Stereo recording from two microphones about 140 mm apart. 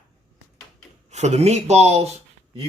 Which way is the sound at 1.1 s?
55° right (ahead or behind).